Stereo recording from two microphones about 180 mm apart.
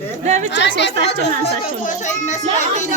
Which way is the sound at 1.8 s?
40° left (ahead or behind).